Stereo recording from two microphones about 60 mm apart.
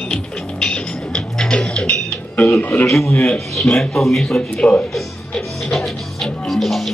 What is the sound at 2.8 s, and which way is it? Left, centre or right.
Speech, left.